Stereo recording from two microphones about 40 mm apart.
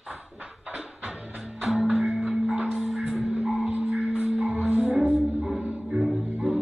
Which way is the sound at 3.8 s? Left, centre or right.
Right.